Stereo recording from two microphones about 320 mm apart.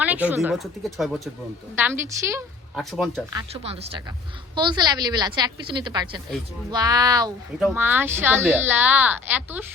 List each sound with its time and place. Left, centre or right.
0.0 s a woman's voice: centre
3.2 s speech: centre